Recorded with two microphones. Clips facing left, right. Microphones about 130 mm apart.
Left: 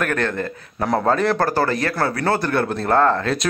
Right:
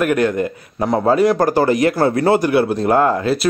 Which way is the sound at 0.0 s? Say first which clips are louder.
Right 6 dB; 10° right (ahead or behind).